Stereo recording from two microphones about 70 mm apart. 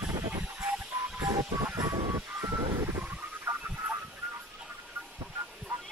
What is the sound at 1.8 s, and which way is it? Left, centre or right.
Vehicle, right.